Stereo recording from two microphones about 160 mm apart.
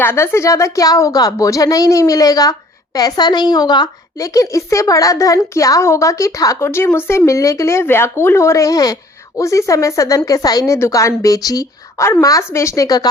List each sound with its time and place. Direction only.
0.0 s a woman's voice: 15° left (ahead or behind)